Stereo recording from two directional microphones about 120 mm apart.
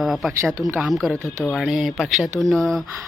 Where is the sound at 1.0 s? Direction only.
5° left (ahead or behind).